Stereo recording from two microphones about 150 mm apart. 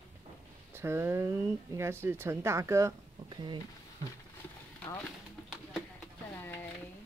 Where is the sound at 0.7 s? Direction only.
15° right (ahead or behind).